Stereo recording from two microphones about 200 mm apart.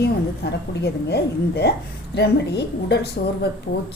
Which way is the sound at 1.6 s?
55° left (ahead or behind).